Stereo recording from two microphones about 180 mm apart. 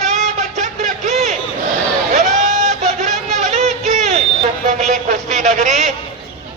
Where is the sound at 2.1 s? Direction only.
40° right (ahead or behind).